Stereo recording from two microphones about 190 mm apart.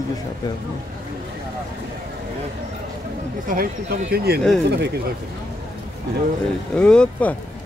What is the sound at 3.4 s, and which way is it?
Speech, 45° right (ahead or behind).